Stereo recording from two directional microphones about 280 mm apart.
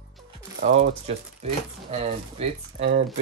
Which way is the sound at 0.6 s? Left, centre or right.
Right.